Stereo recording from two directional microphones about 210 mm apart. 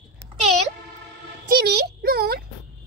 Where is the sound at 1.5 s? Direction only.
45° right (ahead or behind).